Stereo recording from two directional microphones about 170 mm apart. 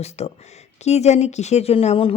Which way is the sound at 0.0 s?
40° left (ahead or behind).